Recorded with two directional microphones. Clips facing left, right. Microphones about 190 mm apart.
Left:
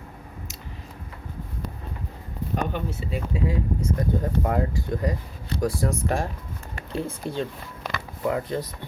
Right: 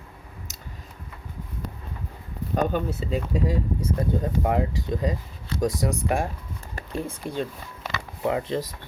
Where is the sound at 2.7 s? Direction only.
40° right (ahead or behind).